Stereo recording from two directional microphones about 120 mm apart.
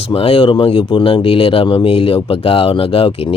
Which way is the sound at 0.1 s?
50° left (ahead or behind).